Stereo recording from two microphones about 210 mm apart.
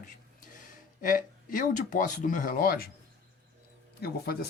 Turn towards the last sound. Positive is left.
turn(degrees=45)  # may be behind; listen again after turning